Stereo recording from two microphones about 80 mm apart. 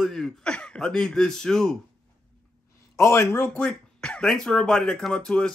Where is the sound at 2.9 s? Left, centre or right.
Left.